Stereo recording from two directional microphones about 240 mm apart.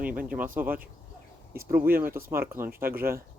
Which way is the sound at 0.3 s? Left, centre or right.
Centre.